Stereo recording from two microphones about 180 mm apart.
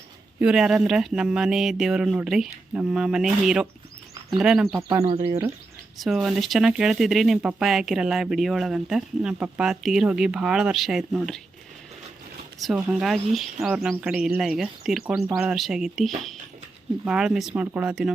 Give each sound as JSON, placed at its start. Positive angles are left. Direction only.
{"t": 0.3, "sound": "speech", "side_deg": -5}
{"t": 5.0, "sound": "speech", "side_deg": -30}
{"t": 6.0, "sound": "speech", "side_deg": 0}
{"t": 12.6, "sound": "speech", "side_deg": 0}